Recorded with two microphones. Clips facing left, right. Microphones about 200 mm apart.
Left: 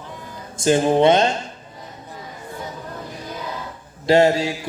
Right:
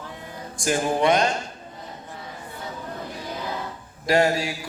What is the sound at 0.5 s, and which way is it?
Music, 25° left (ahead or behind).